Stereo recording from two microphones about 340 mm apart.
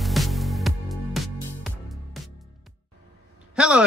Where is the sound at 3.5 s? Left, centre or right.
Centre.